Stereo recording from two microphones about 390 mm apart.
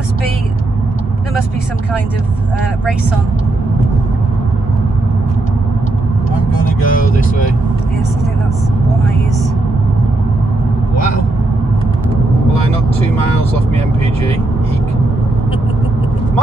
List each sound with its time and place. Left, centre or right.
6.6 s vehicle: centre